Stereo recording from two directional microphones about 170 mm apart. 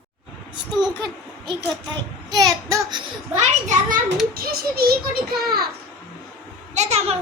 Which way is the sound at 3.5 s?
45° right (ahead or behind).